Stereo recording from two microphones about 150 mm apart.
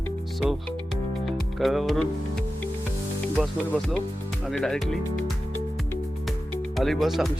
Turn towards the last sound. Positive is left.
turn(degrees=0)  # may be behind; listen again after turning